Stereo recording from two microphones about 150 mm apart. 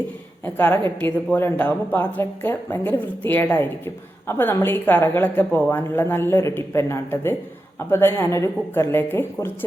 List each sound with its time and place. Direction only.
0.4 s a woman's voice: 15° left (ahead or behind)